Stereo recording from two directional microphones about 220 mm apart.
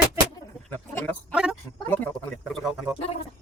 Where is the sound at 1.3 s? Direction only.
5° right (ahead or behind).